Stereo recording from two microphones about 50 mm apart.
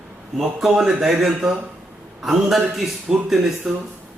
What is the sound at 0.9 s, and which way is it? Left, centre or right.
A man's voice, centre.